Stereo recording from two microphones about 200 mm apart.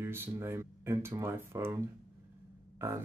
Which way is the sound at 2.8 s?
10° right (ahead or behind).